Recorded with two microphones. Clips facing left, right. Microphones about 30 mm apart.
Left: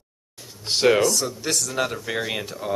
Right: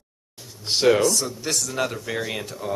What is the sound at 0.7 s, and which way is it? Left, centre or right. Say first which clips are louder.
Speech: even; centre.